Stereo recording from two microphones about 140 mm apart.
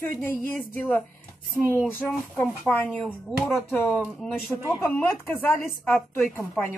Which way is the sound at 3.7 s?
15° left (ahead or behind).